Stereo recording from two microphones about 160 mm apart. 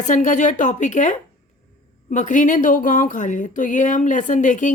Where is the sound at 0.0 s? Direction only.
50° left (ahead or behind).